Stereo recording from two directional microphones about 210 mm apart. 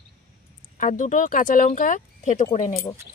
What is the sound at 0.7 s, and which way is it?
Speech, 35° left (ahead or behind).